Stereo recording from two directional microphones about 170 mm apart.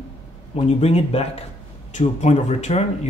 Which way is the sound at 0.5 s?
35° left (ahead or behind).